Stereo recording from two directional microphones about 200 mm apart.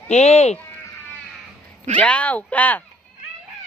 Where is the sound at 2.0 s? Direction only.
5° left (ahead or behind).